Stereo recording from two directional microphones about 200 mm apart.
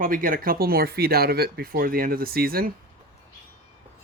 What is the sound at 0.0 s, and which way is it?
Speech, 45° right (ahead or behind).